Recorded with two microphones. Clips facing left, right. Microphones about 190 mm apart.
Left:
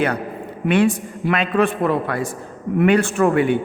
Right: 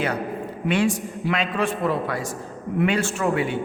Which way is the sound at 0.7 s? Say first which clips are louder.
Left 5 dB; 60° left (ahead or behind).